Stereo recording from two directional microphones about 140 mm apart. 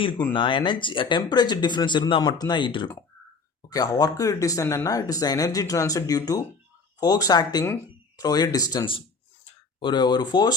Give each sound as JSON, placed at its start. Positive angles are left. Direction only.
{"t": 0.3, "sound": "speech", "side_deg": 35}